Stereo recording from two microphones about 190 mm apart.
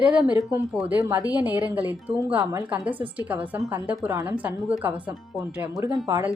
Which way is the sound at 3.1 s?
10° right (ahead or behind).